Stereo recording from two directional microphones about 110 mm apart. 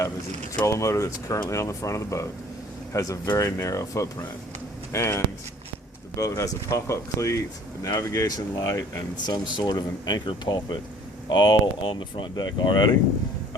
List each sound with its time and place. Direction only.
0.6 s speech: 30° left (ahead or behind)
9.2 s speech: 40° left (ahead or behind)